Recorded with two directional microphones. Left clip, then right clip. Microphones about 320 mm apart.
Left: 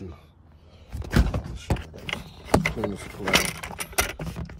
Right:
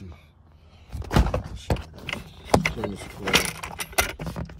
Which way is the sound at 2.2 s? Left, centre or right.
Centre.